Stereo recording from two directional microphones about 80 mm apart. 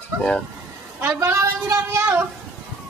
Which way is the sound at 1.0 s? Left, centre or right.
Right.